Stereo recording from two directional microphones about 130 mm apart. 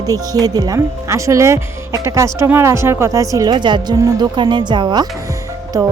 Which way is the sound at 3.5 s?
35° right (ahead or behind).